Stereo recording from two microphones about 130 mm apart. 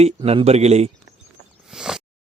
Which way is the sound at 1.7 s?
5° right (ahead or behind).